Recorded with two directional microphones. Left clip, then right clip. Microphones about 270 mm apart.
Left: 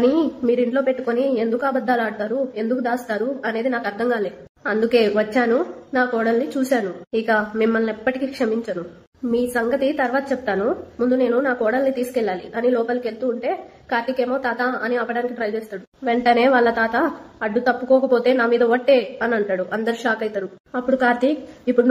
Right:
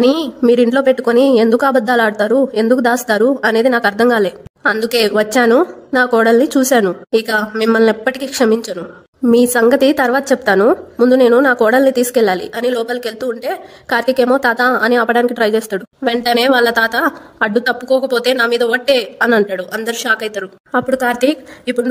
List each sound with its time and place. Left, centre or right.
0.0 s a woman's voice: right